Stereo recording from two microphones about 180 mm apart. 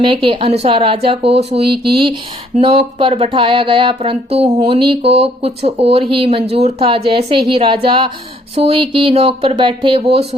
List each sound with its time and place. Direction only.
0.0 s speech: 30° right (ahead or behind)